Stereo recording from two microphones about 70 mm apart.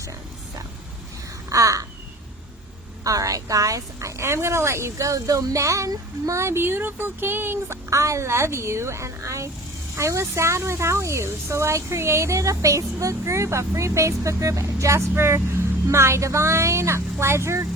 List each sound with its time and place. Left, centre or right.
1.5 s a sound: right
3.0 s speech: right
7.9 s speech: right
15.1 s speech: right